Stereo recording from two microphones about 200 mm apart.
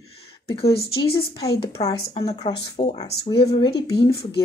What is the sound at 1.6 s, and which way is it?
Speech, 15° left (ahead or behind).